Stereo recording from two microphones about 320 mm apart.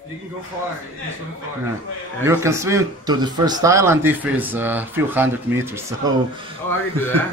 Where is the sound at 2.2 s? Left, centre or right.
Centre.